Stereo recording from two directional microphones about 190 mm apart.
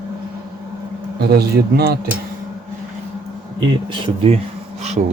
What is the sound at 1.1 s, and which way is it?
Speech, 55° right (ahead or behind).